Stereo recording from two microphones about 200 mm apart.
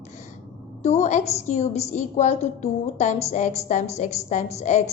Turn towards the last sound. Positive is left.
turn(degrees=35)  # may be behind; listen again after turning